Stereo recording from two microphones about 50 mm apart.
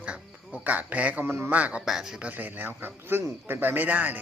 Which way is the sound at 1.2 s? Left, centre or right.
Right.